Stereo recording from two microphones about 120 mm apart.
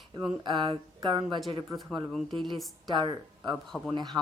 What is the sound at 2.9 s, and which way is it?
Speech, 40° right (ahead or behind).